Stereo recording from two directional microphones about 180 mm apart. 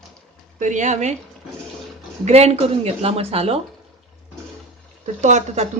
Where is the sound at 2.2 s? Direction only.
35° right (ahead or behind).